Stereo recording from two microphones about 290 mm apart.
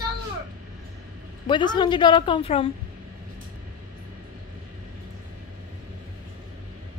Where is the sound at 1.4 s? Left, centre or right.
Centre.